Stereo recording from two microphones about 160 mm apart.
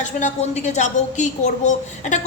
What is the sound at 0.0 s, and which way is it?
A woman's voice, 45° left (ahead or behind).